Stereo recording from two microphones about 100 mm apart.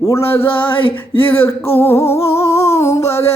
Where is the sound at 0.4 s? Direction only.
65° left (ahead or behind).